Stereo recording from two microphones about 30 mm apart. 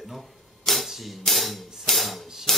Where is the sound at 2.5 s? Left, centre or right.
Centre.